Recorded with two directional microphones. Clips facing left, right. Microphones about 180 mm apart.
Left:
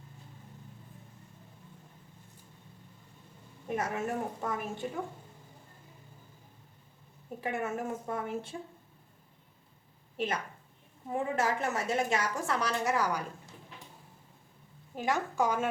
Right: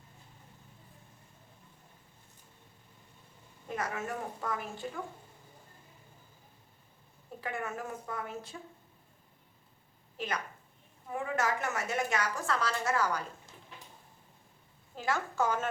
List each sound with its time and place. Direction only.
3.7 s a woman's voice: 25° left (ahead or behind)
7.4 s a woman's voice: 25° left (ahead or behind)
10.2 s a woman's voice: 25° left (ahead or behind)
14.9 s a woman's voice: 15° left (ahead or behind)